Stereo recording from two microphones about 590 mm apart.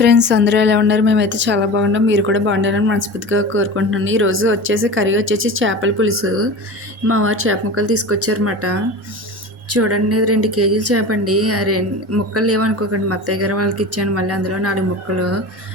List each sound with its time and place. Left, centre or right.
0.0 s speech: centre